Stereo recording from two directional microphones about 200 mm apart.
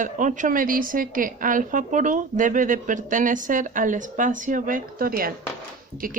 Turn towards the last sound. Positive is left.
turn(degrees=-45)  # may be behind; listen again after turning